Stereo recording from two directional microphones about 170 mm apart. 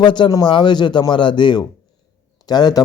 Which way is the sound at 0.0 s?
25° left (ahead or behind).